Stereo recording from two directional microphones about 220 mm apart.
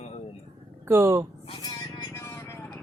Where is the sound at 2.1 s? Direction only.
10° left (ahead or behind).